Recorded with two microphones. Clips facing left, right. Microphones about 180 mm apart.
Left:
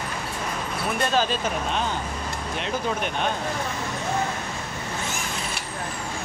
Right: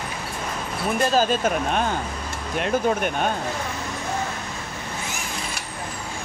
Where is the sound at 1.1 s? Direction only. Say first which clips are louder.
Right 4 dB; 50° right (ahead or behind).